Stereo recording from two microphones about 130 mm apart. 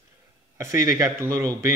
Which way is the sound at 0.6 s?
25° right (ahead or behind).